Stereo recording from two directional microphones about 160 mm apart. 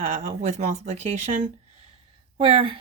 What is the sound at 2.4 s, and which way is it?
Speech, 35° right (ahead or behind).